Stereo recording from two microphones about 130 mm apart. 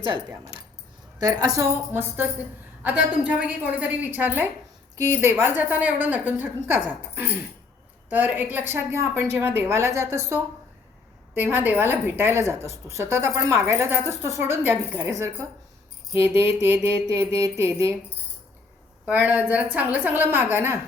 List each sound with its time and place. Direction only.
1.2 s mantra: 25° right (ahead or behind)
1.9 s a woman's voice: 15° right (ahead or behind)
9.3 s mantra: 15° right (ahead or behind)
11.3 s a woman's voice: 15° right (ahead or behind)
13.0 s mantra: 20° right (ahead or behind)
14.4 s a woman's voice: 15° right (ahead or behind)
16.1 s mantra: 20° right (ahead or behind)
19.0 s a woman's voice: 10° right (ahead or behind)